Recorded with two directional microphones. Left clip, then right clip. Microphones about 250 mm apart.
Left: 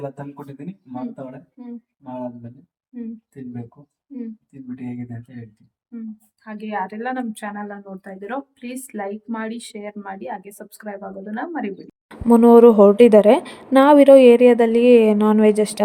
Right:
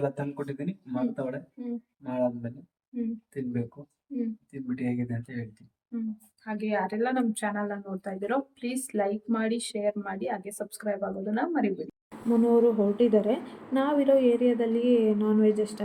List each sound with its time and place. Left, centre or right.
2.0 s speech: centre
6.4 s speech: centre
12.3 s a woman's voice: left